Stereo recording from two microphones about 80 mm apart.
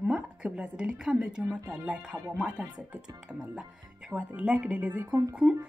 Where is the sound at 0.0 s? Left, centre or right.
Centre.